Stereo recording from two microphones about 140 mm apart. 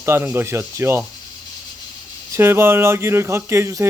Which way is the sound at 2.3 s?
15° right (ahead or behind).